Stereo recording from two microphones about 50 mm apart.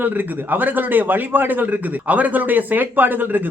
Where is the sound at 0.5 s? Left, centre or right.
Right.